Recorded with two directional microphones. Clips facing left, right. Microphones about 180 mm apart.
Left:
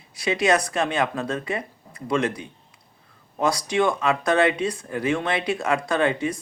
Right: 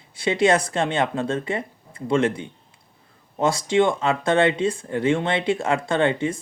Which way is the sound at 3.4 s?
25° right (ahead or behind).